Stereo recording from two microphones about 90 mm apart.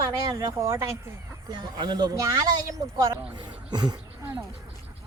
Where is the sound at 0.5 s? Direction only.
30° right (ahead or behind).